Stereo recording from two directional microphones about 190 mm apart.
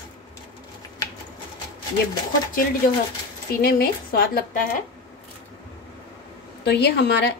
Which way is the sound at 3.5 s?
55° left (ahead or behind).